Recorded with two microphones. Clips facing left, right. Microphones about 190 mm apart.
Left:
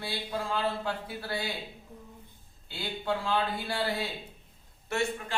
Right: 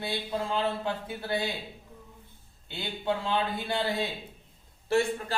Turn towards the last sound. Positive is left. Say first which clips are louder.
# right 5 dB
turn(degrees=-30)  # may be behind; listen again after turning